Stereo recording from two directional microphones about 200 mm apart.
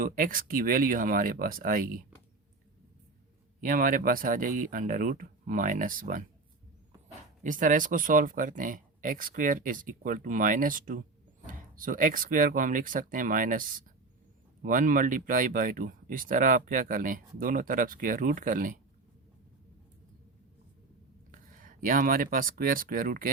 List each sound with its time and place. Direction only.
0.0 s speech: 45° right (ahead or behind)
3.6 s speech: 45° right (ahead or behind)
7.4 s speech: 40° right (ahead or behind)
21.3 s speech: 45° right (ahead or behind)